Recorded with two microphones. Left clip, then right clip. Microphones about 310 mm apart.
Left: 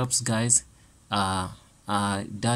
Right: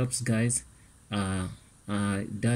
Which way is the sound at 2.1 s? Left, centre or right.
Left.